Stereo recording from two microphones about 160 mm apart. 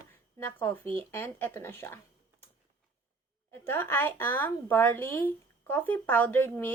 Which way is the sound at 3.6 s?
15° left (ahead or behind).